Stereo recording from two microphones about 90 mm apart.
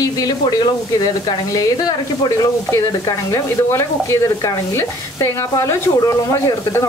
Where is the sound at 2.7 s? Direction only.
40° left (ahead or behind).